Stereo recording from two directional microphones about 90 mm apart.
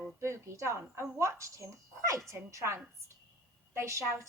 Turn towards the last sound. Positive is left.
turn(degrees=-30)  # may be behind; listen again after turning